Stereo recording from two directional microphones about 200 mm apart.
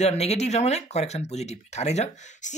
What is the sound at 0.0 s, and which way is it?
Speech, 35° left (ahead or behind).